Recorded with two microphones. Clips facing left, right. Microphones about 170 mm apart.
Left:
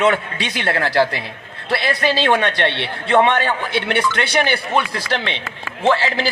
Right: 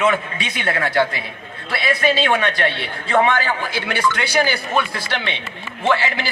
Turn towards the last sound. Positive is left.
turn(degrees=30)  # may be behind; listen again after turning